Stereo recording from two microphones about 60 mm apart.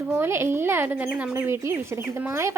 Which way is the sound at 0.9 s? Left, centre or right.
Right.